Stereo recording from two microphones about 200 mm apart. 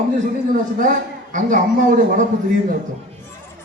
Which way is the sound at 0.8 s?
40° right (ahead or behind).